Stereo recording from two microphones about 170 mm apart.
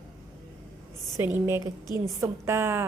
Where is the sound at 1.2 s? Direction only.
15° right (ahead or behind).